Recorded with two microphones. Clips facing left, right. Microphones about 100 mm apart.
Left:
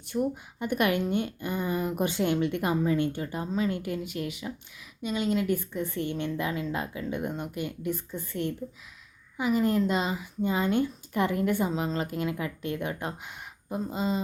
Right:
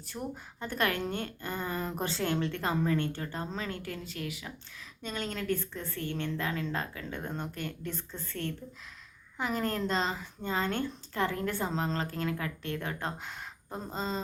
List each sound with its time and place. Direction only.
0.1 s speech: centre (ahead or behind)
0.6 s a woman's voice: 15° left (ahead or behind)
5.0 s a woman's voice: 10° left (ahead or behind)